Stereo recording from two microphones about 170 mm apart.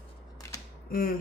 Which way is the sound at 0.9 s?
55° left (ahead or behind).